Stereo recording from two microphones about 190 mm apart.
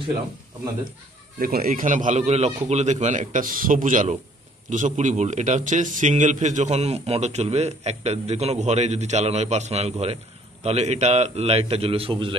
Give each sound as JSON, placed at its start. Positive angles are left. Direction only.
{"t": 1.4, "sound": "a man's voice", "side_deg": -50}